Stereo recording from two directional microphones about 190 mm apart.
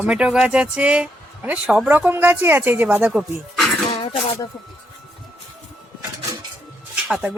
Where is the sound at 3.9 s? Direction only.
30° left (ahead or behind).